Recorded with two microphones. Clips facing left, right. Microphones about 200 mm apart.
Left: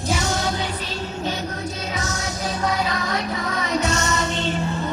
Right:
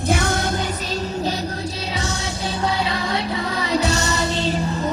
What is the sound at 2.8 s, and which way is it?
Music, 30° right (ahead or behind).